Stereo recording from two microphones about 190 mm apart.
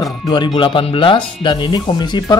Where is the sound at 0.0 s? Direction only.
25° left (ahead or behind).